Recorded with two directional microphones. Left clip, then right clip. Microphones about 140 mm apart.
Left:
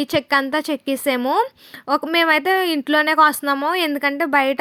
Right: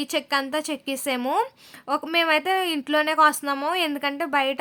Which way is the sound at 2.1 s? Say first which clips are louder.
Left 4 dB; 35° left (ahead or behind).